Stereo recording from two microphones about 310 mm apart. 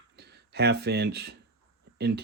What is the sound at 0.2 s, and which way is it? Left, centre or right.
Speech, right.